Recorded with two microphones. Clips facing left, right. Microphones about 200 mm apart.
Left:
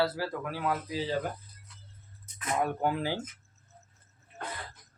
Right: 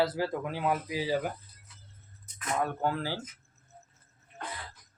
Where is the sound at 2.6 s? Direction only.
15° left (ahead or behind).